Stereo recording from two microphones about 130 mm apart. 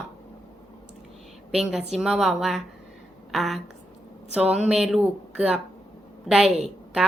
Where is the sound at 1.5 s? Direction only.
5° right (ahead or behind).